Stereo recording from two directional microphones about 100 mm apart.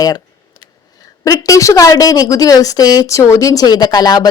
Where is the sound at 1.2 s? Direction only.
35° left (ahead or behind).